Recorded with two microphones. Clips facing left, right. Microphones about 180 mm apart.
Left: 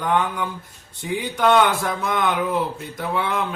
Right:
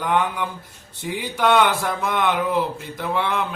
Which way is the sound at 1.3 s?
Centre (ahead or behind).